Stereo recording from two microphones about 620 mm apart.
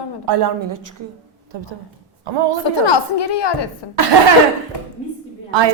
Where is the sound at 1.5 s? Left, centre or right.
Right.